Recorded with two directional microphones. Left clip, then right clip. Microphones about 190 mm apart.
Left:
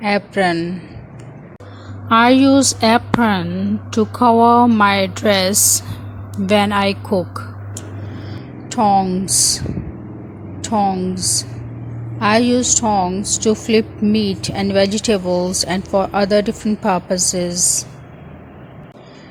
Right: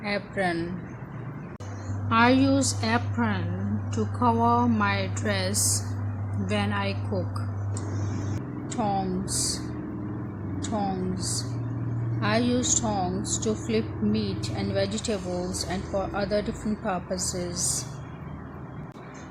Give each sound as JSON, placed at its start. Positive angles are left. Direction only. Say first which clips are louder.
{"t": 0.0, "sound": "a woman's voice", "louder": "left 11 dB", "side_deg": 45}
{"t": 2.0, "sound": "a woman's voice", "louder": "left 10 dB", "side_deg": 45}
{"t": 8.7, "sound": "speech", "louder": "left 14 dB", "side_deg": 40}
{"t": 10.6, "sound": "a woman's voice", "louder": "left 13 dB", "side_deg": 45}